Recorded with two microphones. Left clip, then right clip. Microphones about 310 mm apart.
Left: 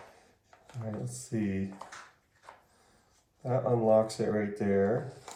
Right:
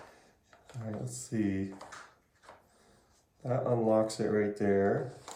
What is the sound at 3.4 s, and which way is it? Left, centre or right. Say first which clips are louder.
Speech: left 2 dB; centre.